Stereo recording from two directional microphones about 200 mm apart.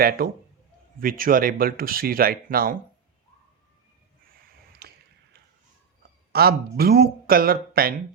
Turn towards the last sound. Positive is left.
turn(degrees=-50)  # may be behind; listen again after turning